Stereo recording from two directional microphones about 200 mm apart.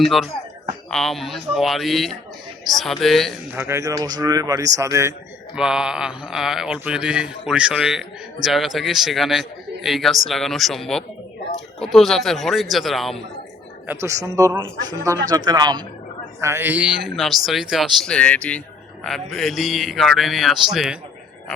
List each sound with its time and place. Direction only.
0.0 s a man's voice: centre (ahead or behind)
3.5 s speech: 10° right (ahead or behind)
5.5 s a man's voice: 5° right (ahead or behind)
13.8 s a man's voice: 15° right (ahead or behind)